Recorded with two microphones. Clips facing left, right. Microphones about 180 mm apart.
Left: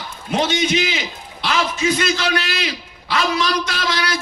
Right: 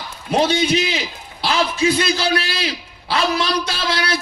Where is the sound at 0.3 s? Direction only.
35° right (ahead or behind).